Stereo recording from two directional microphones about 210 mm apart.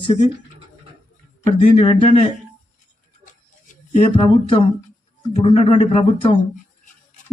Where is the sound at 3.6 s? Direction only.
35° left (ahead or behind).